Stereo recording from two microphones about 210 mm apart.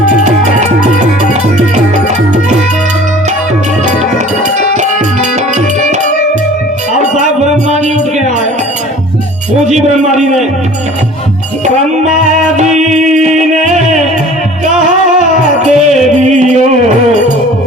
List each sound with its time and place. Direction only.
7.0 s music: 35° right (ahead or behind)
9.6 s music: 35° right (ahead or behind)
12.5 s music: 35° right (ahead or behind)
15.6 s music: 35° right (ahead or behind)